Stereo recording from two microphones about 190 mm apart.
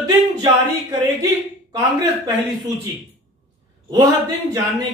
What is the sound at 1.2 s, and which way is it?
Speech, 20° right (ahead or behind).